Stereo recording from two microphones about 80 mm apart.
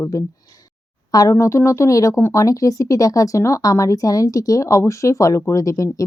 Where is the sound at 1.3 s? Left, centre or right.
Left.